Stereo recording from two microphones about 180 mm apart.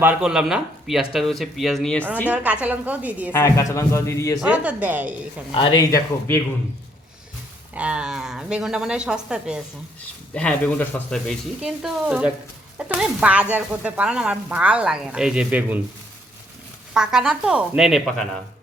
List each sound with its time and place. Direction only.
0.0 s speech: 5° right (ahead or behind)
2.3 s speech: 10° right (ahead or behind)
3.3 s a man's voice: 15° left (ahead or behind)
4.4 s speech: 5° right (ahead or behind)
5.5 s speech: 25° left (ahead or behind)
7.7 s speech: 5° right (ahead or behind)
10.3 s speech: 5° left (ahead or behind)
16.9 s speech: 5° right (ahead or behind)